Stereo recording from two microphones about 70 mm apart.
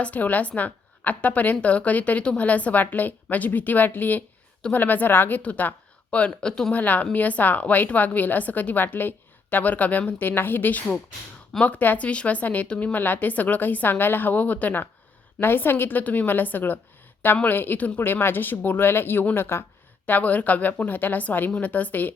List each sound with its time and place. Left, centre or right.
0.0 s a woman's voice: left
20.1 s a woman's voice: left